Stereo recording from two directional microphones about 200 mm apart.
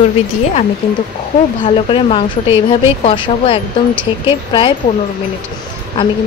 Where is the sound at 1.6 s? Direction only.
25° left (ahead or behind).